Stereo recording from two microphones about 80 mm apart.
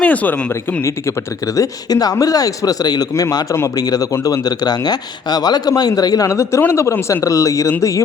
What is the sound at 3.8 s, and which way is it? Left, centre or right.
Speech, left.